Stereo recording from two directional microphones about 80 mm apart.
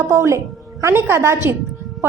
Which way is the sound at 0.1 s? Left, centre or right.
Right.